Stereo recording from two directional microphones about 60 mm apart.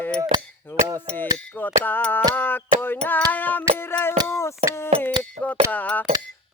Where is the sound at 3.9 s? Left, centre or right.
Left.